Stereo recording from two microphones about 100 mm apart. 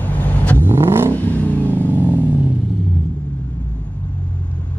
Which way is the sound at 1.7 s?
20° right (ahead or behind).